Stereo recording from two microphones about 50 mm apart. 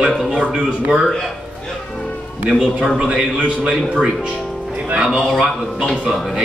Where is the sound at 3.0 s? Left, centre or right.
Centre.